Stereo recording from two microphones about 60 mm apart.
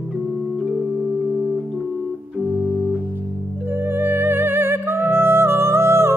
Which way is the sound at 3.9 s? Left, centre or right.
Right.